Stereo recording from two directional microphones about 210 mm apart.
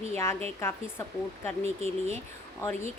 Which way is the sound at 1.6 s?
30° right (ahead or behind).